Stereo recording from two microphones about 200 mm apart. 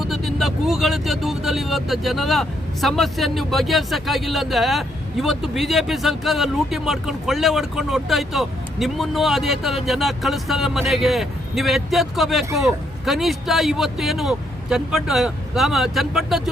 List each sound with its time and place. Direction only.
0.0 s speech: centre (ahead or behind)